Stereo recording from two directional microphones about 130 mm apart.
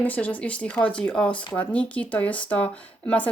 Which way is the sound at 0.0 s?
10° left (ahead or behind).